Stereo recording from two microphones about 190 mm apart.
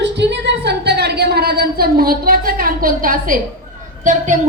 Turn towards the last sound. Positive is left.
turn(degrees=-40)  # may be behind; listen again after turning